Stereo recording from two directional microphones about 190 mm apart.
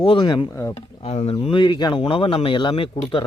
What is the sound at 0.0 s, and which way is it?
Speech, 25° left (ahead or behind).